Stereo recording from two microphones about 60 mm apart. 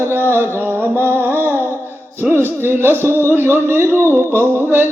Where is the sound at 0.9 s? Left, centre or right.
Right.